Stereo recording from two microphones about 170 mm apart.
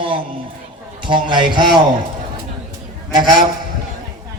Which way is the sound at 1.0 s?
30° right (ahead or behind).